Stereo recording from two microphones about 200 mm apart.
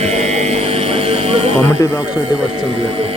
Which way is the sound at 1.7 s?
15° left (ahead or behind).